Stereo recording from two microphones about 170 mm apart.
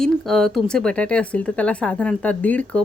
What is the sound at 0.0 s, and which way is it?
Speech, centre (ahead or behind).